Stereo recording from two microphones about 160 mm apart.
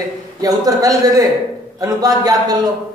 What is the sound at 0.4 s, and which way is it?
Speech, 20° right (ahead or behind).